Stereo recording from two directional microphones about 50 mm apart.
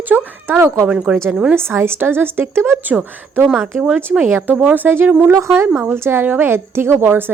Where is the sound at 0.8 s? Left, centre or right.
Right.